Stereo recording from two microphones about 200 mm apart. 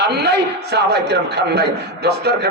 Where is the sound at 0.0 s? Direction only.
55° right (ahead or behind).